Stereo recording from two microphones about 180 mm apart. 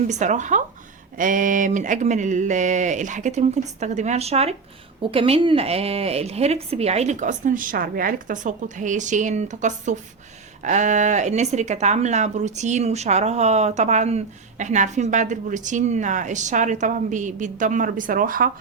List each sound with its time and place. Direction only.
0.1 s speech: 40° right (ahead or behind)